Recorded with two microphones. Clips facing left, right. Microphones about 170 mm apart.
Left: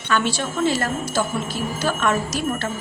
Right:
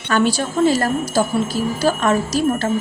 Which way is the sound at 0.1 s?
40° right (ahead or behind).